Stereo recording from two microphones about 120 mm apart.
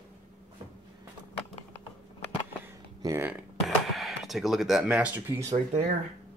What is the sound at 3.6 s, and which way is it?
Speech, centre (ahead or behind).